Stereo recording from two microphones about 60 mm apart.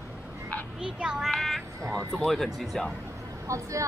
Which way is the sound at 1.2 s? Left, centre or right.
Centre.